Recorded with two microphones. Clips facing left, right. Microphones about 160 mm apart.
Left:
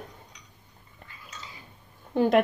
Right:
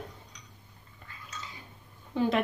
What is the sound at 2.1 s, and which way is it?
Speech, 50° left (ahead or behind).